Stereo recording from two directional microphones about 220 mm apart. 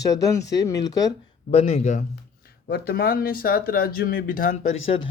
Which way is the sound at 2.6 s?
45° left (ahead or behind).